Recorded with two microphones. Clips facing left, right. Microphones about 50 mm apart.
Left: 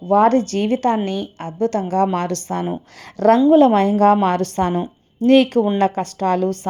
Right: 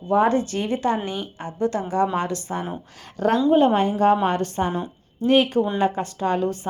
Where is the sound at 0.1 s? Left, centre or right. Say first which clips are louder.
Left 5 dB; left.